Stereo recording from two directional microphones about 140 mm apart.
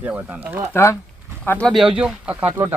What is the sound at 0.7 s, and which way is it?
Speech, 20° left (ahead or behind).